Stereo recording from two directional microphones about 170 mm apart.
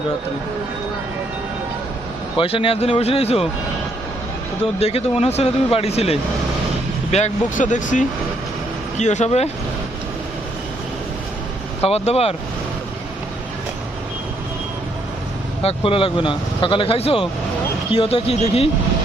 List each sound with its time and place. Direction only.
2.4 s speech: 30° left (ahead or behind)
4.8 s speech: 35° left (ahead or behind)
11.8 s speech: 35° left (ahead or behind)
15.6 s speech: 30° left (ahead or behind)